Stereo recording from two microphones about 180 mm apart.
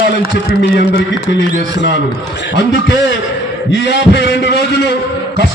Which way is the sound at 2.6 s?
80° left.